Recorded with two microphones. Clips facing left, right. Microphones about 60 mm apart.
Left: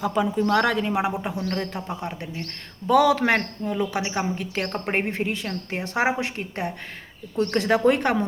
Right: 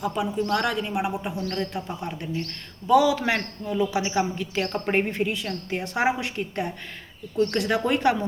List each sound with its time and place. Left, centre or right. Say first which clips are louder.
0.0 s speech: left 3 dB; left
1.5 s a woman's voice: left 1 dB; left
1.9 s a woman's voice: even; left
2.8 s a man's voice: left 1 dB; left